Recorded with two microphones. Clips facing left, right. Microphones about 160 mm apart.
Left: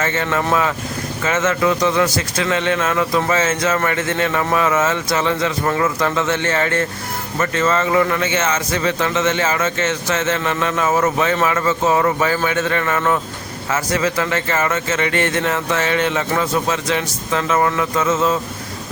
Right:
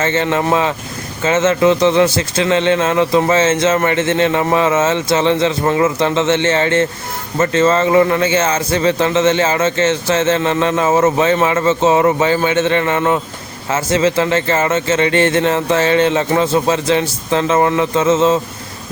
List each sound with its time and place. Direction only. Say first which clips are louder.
0.0 s a man's voice: right 4 dB; 25° right (ahead or behind)